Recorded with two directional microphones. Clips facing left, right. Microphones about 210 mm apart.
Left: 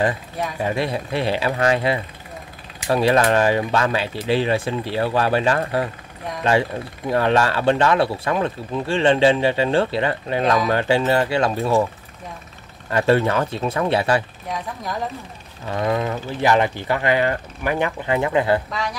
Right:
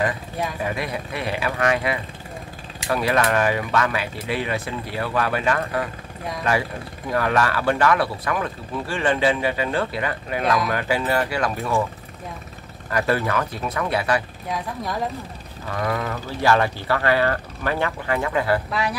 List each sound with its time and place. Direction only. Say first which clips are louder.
0.7 s speech: left 4 dB; 30° left (ahead or behind)
7.1 s speech: left 3 dB; 25° left (ahead or behind)
12.9 s speech: left 4 dB; 25° left (ahead or behind)
14.5 s speech: even; centre (ahead or behind)
15.7 s speech: left 4 dB; 20° left (ahead or behind)
18.7 s speech: right 2 dB; 5° right (ahead or behind)